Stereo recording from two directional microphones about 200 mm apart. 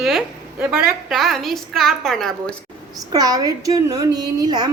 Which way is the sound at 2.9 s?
20° right (ahead or behind).